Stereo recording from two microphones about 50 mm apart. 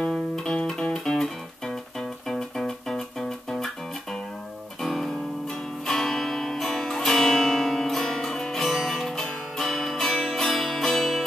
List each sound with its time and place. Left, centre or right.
0.0 s music: centre